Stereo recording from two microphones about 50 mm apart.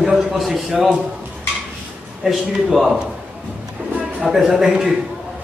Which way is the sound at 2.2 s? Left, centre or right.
Centre.